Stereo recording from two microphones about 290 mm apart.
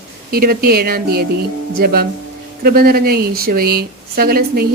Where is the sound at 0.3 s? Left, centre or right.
Right.